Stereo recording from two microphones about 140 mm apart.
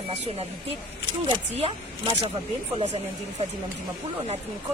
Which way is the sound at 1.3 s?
45° right (ahead or behind).